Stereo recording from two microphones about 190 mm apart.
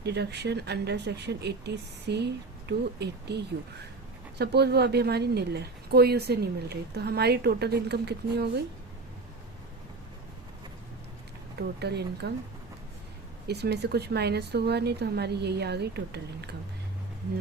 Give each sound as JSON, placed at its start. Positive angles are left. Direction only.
{"t": 0.0, "sound": "a woman's voice", "side_deg": -65}
{"t": 11.5, "sound": "a woman's voice", "side_deg": -60}
{"t": 13.5, "sound": "a woman's voice", "side_deg": -60}